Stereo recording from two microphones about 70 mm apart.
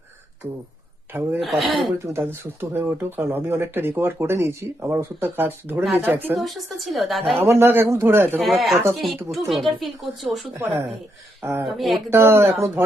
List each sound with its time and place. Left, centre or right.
1.1 s speech: right
1.4 s speech: centre
2.0 s speech: right
6.3 s speech: centre
7.4 s speech: right
8.4 s speech: centre
11.4 s speech: right
11.8 s speech: centre
12.1 s speech: right